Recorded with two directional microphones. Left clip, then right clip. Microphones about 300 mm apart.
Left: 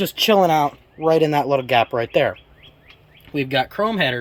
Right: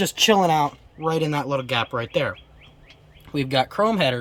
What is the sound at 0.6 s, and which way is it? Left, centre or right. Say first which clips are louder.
Speech: left 4 dB; right.